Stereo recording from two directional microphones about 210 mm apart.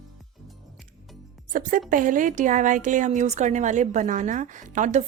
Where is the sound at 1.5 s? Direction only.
40° right (ahead or behind).